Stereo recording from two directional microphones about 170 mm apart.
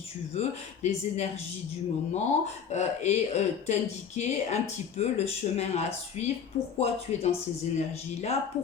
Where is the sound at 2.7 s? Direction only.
40° left (ahead or behind).